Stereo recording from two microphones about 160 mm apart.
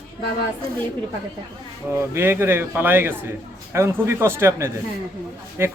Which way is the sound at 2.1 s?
15° right (ahead or behind).